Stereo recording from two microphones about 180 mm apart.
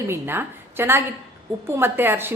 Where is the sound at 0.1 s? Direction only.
10° right (ahead or behind).